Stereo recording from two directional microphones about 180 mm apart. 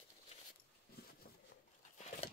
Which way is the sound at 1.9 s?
40° left (ahead or behind).